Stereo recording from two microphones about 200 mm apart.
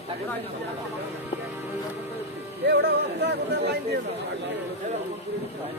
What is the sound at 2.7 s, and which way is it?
Speech, 55° right (ahead or behind).